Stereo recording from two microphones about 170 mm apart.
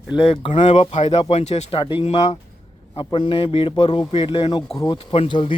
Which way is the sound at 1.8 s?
30° left (ahead or behind).